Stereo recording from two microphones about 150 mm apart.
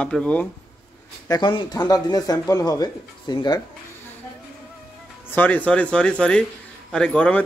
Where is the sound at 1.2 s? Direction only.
25° left (ahead or behind).